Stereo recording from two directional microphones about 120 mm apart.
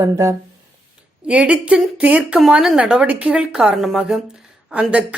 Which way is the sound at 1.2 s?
10° right (ahead or behind).